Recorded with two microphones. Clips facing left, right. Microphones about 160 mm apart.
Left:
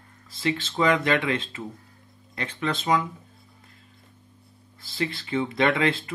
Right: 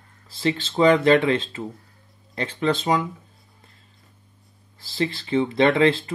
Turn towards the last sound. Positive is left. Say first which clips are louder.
# right 5 dB
turn(degrees=-30)  # may be behind; listen again after turning